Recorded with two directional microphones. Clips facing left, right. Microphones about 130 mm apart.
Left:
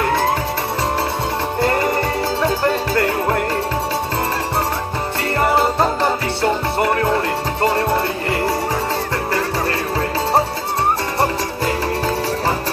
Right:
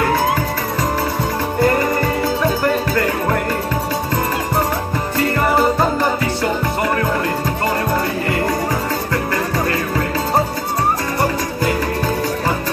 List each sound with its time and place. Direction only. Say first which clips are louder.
1.6 s music: right 2 dB; 25° left (ahead or behind)
5.5 s music: even; 30° left (ahead or behind)